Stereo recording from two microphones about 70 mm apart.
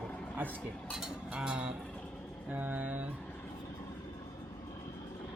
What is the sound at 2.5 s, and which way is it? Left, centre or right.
Speech, right.